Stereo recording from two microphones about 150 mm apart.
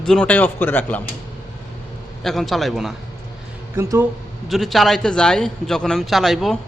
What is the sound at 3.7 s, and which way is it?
Speech, 20° right (ahead or behind).